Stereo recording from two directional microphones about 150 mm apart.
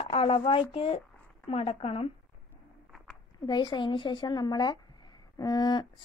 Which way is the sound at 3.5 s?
30° left (ahead or behind).